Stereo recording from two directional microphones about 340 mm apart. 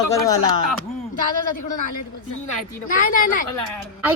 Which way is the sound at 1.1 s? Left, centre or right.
Left.